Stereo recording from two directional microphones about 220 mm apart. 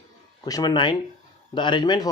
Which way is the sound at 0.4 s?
15° left (ahead or behind).